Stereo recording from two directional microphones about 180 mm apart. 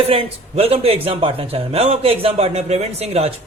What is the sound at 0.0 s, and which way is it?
A man's voice, 30° right (ahead or behind).